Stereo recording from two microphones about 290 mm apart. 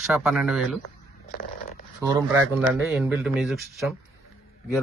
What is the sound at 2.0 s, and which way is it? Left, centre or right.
Speech, centre.